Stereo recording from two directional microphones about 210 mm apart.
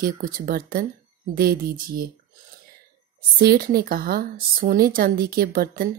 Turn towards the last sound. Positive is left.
turn(degrees=-45)  # may be behind; listen again after turning